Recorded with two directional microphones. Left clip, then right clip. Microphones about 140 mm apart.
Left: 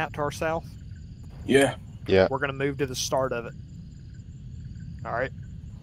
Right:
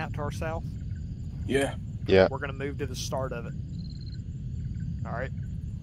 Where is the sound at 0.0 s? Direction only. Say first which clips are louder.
Left 7 dB; 65° left (ahead or behind).